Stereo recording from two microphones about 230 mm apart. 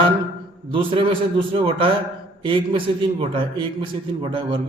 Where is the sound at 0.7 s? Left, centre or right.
Right.